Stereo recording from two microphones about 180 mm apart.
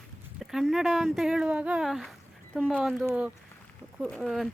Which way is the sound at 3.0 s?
5° right (ahead or behind).